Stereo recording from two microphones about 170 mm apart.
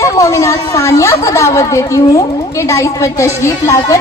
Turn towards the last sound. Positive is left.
turn(degrees=20)  # may be behind; listen again after turning